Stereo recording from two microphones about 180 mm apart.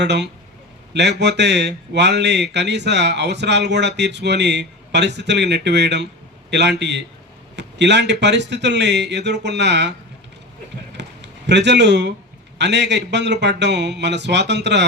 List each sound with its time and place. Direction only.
0.0 s a man's voice: 70° right (ahead or behind)
10.9 s a sound: 75° right (ahead or behind)
12.5 s a man's voice: 75° right (ahead or behind)